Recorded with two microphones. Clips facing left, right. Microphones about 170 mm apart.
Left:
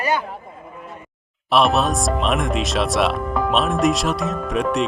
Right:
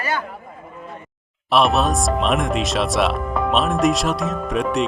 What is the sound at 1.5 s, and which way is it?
Speech, centre (ahead or behind).